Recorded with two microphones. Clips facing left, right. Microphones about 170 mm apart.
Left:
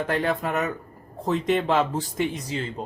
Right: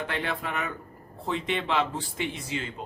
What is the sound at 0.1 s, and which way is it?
Speech, 40° left (ahead or behind).